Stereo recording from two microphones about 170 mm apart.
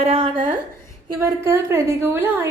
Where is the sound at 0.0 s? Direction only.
35° right (ahead or behind).